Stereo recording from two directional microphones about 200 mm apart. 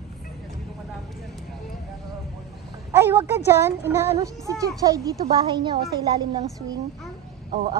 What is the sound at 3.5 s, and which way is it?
A woman's voice, 10° right (ahead or behind).